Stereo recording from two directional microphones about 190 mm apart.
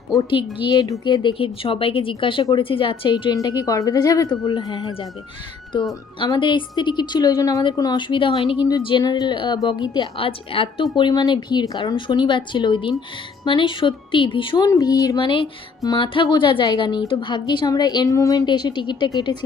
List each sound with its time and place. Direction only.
0.2 s speech: 25° left (ahead or behind)
6.1 s speech: 25° left (ahead or behind)